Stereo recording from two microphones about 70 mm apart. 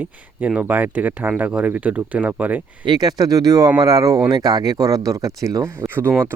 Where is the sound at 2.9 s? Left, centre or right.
Right.